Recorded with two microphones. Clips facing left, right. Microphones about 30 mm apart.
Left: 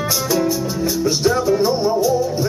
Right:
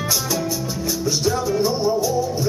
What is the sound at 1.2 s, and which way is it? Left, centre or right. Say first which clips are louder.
Music: left 4 dB; centre.